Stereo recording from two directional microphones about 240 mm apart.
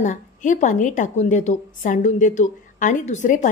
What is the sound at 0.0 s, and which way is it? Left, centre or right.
A woman's voice, left.